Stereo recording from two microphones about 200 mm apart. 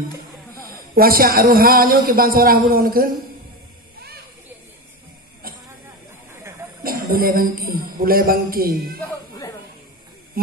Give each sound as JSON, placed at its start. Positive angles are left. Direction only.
{"t": 0.7, "sound": "speech", "side_deg": -45}
{"t": 6.8, "sound": "speech", "side_deg": -45}
{"t": 10.4, "sound": "speech", "side_deg": -50}